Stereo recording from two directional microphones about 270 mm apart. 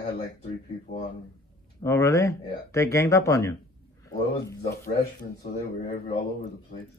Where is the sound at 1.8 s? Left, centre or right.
Centre.